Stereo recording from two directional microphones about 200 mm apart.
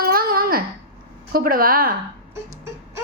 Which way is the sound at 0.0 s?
45° right (ahead or behind).